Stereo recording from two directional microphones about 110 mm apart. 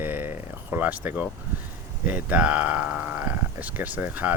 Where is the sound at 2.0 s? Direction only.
10° right (ahead or behind).